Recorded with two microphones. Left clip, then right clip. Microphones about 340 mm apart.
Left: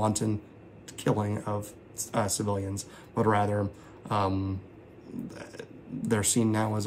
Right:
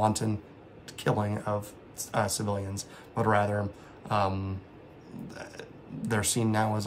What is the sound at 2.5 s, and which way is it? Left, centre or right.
Speech, right.